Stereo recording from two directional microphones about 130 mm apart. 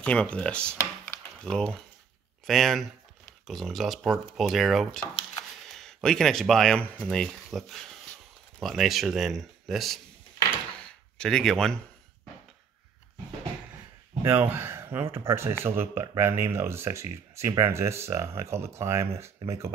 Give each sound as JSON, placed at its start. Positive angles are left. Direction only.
{"t": 0.0, "sound": "speech", "side_deg": 10}
{"t": 0.7, "sound": "computer keyboard", "side_deg": 20}
{"t": 1.4, "sound": "speech", "side_deg": 5}
{"t": 11.1, "sound": "speech", "side_deg": 5}
{"t": 14.2, "sound": "speech", "side_deg": -15}